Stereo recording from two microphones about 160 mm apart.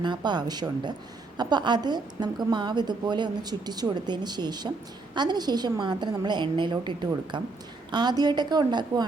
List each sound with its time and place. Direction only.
0.0 s a woman's voice: 30° right (ahead or behind)